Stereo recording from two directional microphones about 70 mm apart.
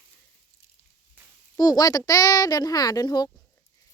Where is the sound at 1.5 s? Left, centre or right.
Left.